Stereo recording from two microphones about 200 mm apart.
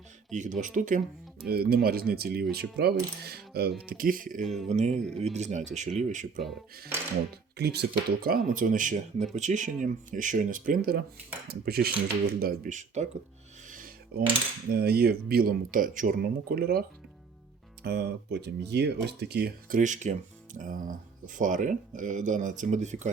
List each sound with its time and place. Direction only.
0.3 s speech: 40° right (ahead or behind)
4.4 s speech: centre (ahead or behind)
4.7 s speech: 35° right (ahead or behind)
7.5 s speech: 55° right (ahead or behind); by 13.1 s 35° right (ahead or behind)
13.7 s a sound: 45° right (ahead or behind)
14.7 s speech: 50° right (ahead or behind)
17.8 s speech: 55° right (ahead or behind); by 23.0 s 35° right (ahead or behind)